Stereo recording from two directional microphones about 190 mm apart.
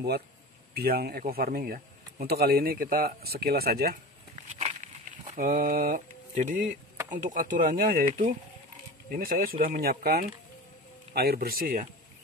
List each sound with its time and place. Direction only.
0.7 s speech: 55° right (ahead or behind)
4.5 s a sound: 40° right (ahead or behind)
5.3 s speech: 50° right (ahead or behind)
9.1 s speech: 50° right (ahead or behind)